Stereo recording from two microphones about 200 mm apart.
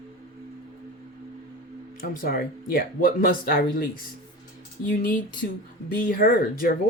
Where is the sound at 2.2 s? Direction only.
50° left (ahead or behind).